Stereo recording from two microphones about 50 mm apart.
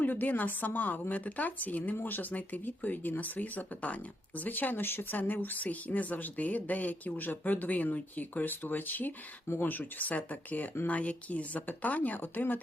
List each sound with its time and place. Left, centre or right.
0.0 s speech: left